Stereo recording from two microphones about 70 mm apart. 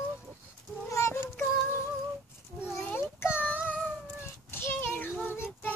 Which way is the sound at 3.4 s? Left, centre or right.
Left.